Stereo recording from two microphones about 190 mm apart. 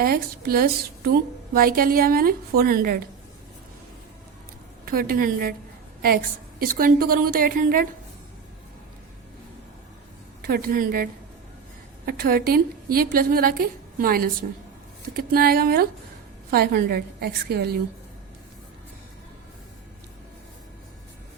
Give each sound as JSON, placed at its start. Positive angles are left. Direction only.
{"t": 0.0, "sound": "a woman's voice", "side_deg": -50}
{"t": 4.9, "sound": "a woman's voice", "side_deg": -50}
{"t": 6.6, "sound": "a woman's voice", "side_deg": -50}
{"t": 10.4, "sound": "a woman's voice", "side_deg": -50}